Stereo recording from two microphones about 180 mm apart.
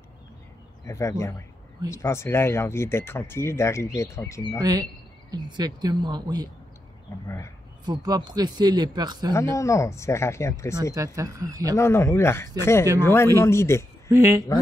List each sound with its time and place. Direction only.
0.8 s speech: 15° left (ahead or behind)
4.6 s speech: 20° right (ahead or behind)
7.2 s speech: 15° left (ahead or behind)
7.8 s speech: 20° right (ahead or behind)
9.6 s speech: 15° left (ahead or behind)
11.1 s speech: 20° right (ahead or behind)
11.7 s speech: 15° left (ahead or behind)
14.0 s speech: 15° right (ahead or behind)